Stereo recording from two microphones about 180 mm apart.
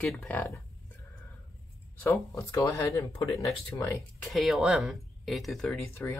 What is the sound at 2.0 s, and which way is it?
Speech, 15° left (ahead or behind).